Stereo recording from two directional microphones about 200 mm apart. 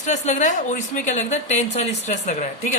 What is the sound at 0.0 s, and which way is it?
A woman's voice, 35° left (ahead or behind).